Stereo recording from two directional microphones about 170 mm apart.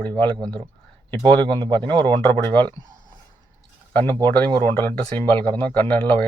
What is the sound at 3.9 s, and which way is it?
Speech, 10° left (ahead or behind).